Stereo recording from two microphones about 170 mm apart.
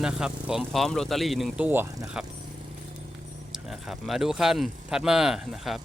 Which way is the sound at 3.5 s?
Centre (ahead or behind).